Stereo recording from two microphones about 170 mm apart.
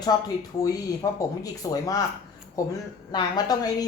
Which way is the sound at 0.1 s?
25° left (ahead or behind).